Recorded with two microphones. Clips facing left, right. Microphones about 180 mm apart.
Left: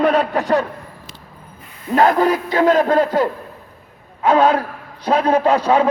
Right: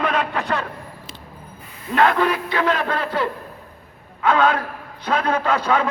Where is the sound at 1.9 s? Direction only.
40° left (ahead or behind).